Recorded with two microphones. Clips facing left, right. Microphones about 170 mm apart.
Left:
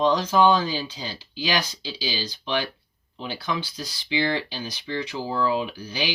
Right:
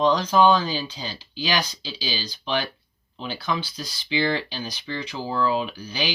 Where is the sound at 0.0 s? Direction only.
20° left (ahead or behind).